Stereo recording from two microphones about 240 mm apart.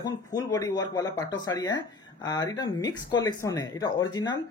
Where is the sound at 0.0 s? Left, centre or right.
Centre.